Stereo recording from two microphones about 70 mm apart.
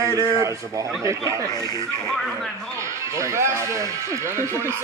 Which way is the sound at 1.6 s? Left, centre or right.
Left.